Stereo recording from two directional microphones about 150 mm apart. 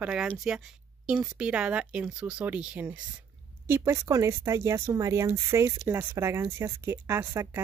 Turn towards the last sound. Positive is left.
turn(degrees=-15)  # may be behind; listen again after turning